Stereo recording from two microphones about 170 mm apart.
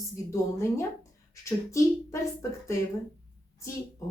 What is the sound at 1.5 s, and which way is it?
A woman's voice, 20° left (ahead or behind).